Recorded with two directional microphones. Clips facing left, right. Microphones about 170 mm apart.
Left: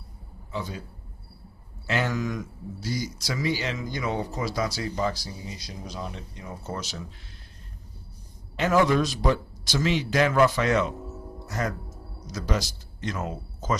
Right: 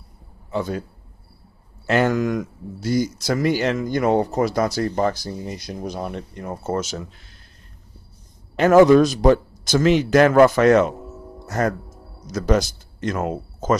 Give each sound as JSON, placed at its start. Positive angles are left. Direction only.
{"t": 0.5, "sound": "a man's voice", "side_deg": -55}
{"t": 1.9, "sound": "speech", "side_deg": -55}
{"t": 8.5, "sound": "speech", "side_deg": -50}